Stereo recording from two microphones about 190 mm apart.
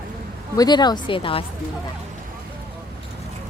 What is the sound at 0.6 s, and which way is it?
Speech, 20° left (ahead or behind).